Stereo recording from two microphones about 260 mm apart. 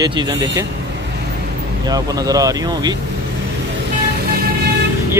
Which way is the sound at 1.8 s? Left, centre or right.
Centre.